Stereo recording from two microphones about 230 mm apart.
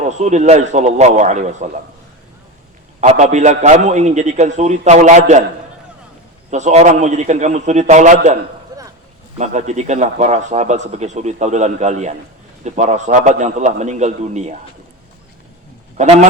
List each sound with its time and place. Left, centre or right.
0.1 s a man's voice: right
3.0 s a man's voice: right
6.5 s a man's voice: right
8.7 s a sound: centre
9.4 s a man's voice: right
16.0 s speech: right